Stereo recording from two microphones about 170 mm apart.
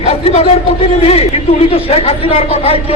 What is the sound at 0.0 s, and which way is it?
A man's voice, 40° left (ahead or behind).